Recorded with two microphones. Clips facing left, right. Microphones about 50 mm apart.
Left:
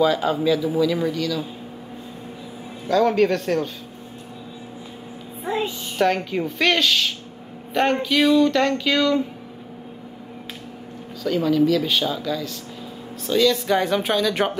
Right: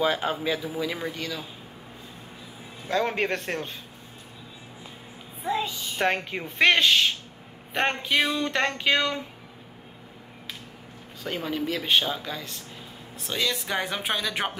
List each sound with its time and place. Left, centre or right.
0.0 s speech: right
2.9 s speech: right
5.9 s speech: right
11.2 s speech: right
13.3 s speech: centre